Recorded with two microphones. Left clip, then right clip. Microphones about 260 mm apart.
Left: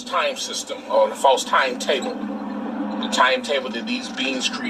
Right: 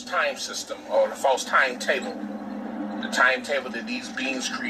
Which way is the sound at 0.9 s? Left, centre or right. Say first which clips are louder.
Left 5 dB; left.